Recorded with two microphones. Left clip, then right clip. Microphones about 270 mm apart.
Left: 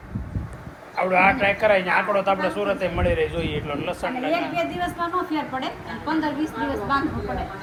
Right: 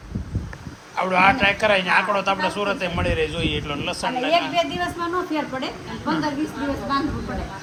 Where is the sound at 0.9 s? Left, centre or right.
Centre.